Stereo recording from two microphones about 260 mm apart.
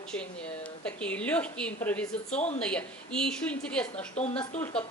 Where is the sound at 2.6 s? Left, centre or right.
Centre.